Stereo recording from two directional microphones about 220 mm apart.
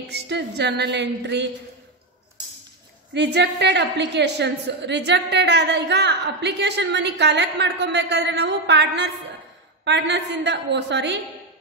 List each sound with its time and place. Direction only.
0.1 s a woman's voice: 50° right (ahead or behind)
3.2 s a woman's voice: 50° right (ahead or behind)